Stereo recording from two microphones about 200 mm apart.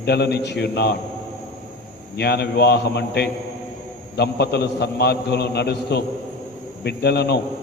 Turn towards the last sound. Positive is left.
turn(degrees=55)  # may be behind; listen again after turning